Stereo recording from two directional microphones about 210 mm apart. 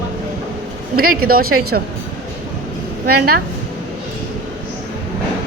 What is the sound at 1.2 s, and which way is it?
Speech, 45° right (ahead or behind).